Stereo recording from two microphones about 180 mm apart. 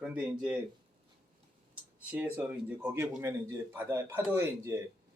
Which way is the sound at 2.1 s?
10° right (ahead or behind).